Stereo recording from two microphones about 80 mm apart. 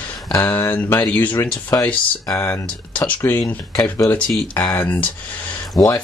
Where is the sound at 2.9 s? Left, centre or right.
Centre.